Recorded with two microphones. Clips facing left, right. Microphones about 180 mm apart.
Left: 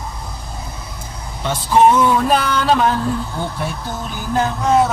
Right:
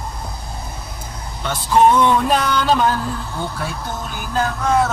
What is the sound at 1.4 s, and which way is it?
Speech, 5° left (ahead or behind).